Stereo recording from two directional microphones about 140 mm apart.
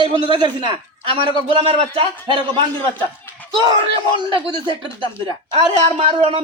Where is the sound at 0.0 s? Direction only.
35° right (ahead or behind).